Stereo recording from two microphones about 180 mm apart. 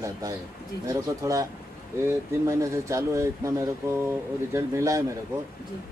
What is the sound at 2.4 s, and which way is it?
Speech, 15° right (ahead or behind).